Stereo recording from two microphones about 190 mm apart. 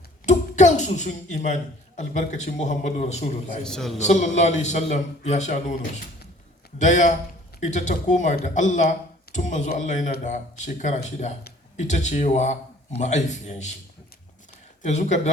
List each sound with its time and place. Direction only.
0.3 s a man's voice: 40° left (ahead or behind)
3.6 s a man's voice: 5° left (ahead or behind)
3.9 s a man's voice: 40° left (ahead or behind)
14.8 s a man's voice: 40° left (ahead or behind)